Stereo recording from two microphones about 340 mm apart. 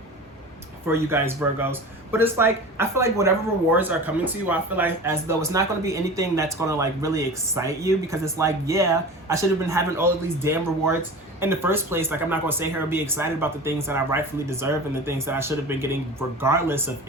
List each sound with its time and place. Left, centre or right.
0.9 s speech: centre